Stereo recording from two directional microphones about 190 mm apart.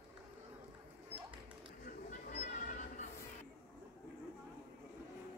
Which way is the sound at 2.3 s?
40° left (ahead or behind).